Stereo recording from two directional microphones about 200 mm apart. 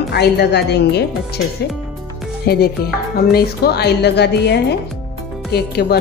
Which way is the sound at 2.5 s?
50° left (ahead or behind).